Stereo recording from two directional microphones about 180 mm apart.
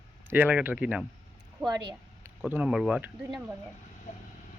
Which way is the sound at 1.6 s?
25° right (ahead or behind).